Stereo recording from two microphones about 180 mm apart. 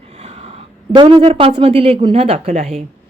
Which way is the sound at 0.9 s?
30° right (ahead or behind).